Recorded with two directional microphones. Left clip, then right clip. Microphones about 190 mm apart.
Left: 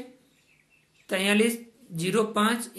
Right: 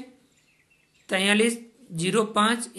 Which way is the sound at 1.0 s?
25° right (ahead or behind).